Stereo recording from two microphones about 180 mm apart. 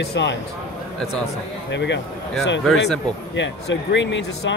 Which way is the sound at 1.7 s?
75° left (ahead or behind).